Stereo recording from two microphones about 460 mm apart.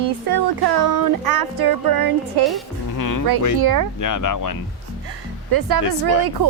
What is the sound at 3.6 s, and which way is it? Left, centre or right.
Speech, right.